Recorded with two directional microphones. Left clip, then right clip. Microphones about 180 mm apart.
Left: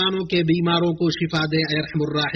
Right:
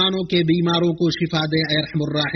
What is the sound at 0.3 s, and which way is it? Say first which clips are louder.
A man's voice: right 1 dB; 45° right (ahead or behind).